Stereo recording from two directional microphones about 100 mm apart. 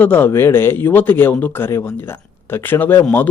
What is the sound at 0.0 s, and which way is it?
Speech, 20° left (ahead or behind).